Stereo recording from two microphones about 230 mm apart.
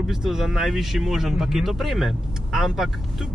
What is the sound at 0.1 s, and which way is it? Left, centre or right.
Speech, centre.